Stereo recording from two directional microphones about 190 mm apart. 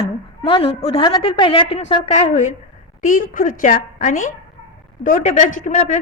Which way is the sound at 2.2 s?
40° left (ahead or behind).